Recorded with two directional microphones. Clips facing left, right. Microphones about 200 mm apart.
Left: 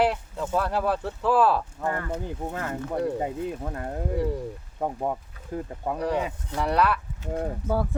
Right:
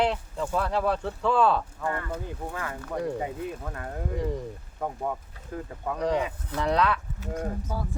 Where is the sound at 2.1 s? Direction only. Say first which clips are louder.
Left 3 dB; 25° left (ahead or behind).